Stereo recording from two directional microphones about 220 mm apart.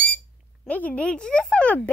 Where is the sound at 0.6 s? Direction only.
5° left (ahead or behind).